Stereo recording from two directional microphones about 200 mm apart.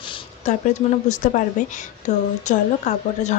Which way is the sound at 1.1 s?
40° left (ahead or behind).